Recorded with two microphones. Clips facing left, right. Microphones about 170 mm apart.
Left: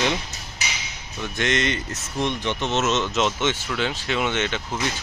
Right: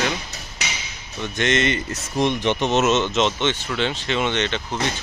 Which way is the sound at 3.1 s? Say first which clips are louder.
Right 2 dB; 5° left (ahead or behind).